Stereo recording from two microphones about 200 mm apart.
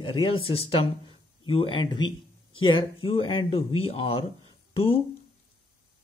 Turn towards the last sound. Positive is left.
turn(degrees=30)  # may be behind; listen again after turning